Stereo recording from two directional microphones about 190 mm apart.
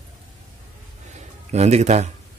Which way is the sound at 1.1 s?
35° right (ahead or behind).